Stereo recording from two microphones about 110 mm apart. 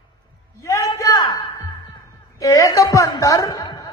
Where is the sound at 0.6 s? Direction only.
30° left (ahead or behind).